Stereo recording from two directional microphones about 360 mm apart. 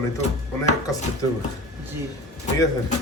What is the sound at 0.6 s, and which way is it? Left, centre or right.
Speech, centre.